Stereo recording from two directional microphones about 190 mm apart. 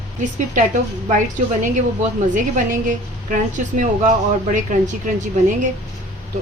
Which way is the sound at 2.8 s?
45° right (ahead or behind).